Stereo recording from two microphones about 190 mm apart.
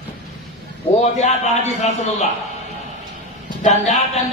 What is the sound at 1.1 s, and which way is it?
Music, 35° left (ahead or behind).